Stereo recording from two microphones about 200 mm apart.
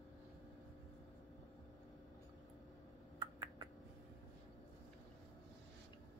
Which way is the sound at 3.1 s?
20° right (ahead or behind).